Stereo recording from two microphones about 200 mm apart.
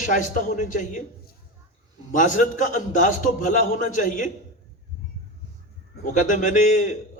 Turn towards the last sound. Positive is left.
turn(degrees=40)  # may be behind; listen again after turning